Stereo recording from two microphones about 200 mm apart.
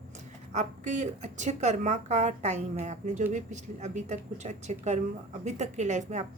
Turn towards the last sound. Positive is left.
turn(degrees=-35)  # may be behind; listen again after turning